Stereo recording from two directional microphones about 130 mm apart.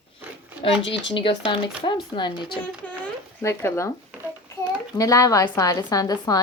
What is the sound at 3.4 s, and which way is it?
Speech, 20° left (ahead or behind).